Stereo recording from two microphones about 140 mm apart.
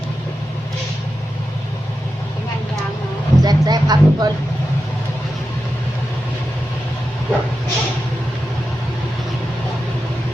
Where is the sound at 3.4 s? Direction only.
30° right (ahead or behind).